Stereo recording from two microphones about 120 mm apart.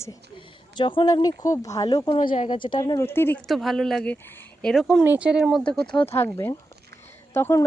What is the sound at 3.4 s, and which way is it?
Speech, centre (ahead or behind).